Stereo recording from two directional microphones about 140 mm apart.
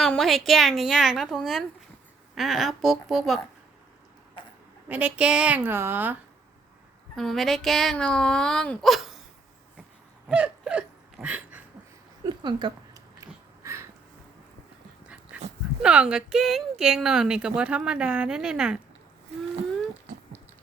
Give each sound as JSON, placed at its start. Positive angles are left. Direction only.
{"t": 0.0, "sound": "a woman's voice", "side_deg": 0}
{"t": 4.9, "sound": "a woman's voice", "side_deg": -10}
{"t": 7.2, "sound": "a woman's voice", "side_deg": 0}
{"t": 10.2, "sound": "hiccup", "side_deg": -5}
{"t": 12.2, "sound": "a sound", "side_deg": -30}
{"t": 13.6, "sound": "a sound", "side_deg": -20}
{"t": 15.0, "sound": "dog", "side_deg": -10}
{"t": 15.8, "sound": "a woman's voice", "side_deg": -5}